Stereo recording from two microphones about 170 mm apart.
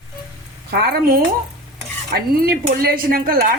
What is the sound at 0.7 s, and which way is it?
A woman's voice, 65° right (ahead or behind).